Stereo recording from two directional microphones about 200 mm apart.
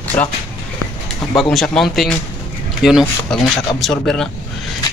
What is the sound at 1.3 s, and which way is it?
Speech, centre (ahead or behind).